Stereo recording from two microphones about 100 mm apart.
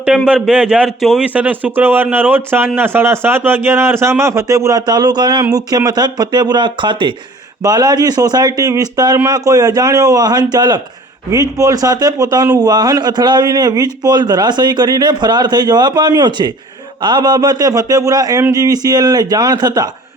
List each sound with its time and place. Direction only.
0.3 s speech: 5° right (ahead or behind)
1.2 s a man's voice: 15° right (ahead or behind); by 7.1 s 50° right (ahead or behind)
7.6 s a man's voice: 40° right (ahead or behind)